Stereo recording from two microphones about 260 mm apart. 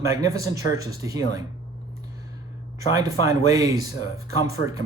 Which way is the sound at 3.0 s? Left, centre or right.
Centre.